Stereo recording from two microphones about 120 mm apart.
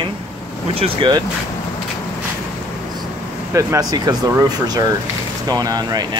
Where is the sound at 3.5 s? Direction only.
25° right (ahead or behind).